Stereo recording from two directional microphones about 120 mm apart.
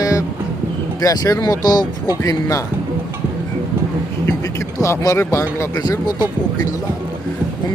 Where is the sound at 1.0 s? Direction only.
30° left (ahead or behind).